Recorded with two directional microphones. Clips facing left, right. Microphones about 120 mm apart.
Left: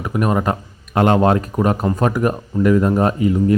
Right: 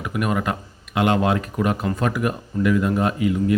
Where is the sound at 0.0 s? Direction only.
35° left (ahead or behind).